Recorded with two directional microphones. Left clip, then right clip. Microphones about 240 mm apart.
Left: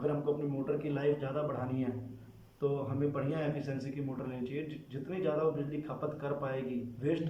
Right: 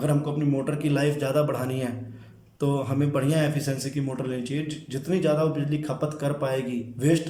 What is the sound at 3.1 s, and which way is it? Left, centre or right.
Speech, right.